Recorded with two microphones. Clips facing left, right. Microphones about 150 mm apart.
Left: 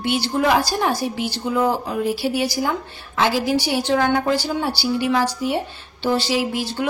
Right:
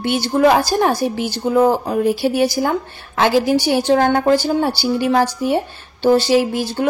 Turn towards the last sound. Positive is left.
turn(degrees=-45)  # may be behind; listen again after turning